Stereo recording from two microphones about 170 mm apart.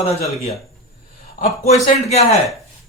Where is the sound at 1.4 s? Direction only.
40° left (ahead or behind).